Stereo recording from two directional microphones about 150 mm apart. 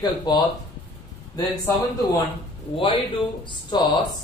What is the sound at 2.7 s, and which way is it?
A man's voice, 35° left (ahead or behind).